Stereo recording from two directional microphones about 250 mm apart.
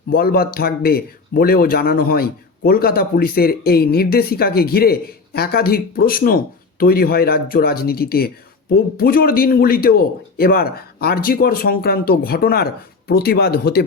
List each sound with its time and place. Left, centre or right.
0.1 s speech: left